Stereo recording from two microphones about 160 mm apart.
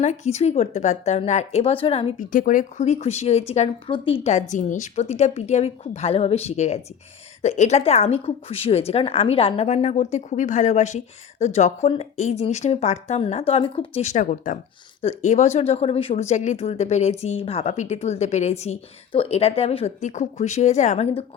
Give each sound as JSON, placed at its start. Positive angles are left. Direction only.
{"t": 0.0, "sound": "a woman's voice", "side_deg": 45}
{"t": 2.1, "sound": "a woman's voice", "side_deg": 55}